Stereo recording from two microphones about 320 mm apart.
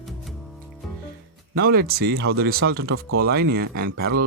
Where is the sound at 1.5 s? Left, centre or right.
Right.